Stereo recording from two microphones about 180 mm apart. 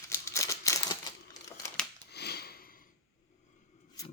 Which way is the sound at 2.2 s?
65° left (ahead or behind).